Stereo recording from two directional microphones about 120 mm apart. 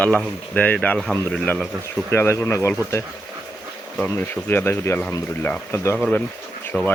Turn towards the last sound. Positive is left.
turn(degrees=15)  # may be behind; listen again after turning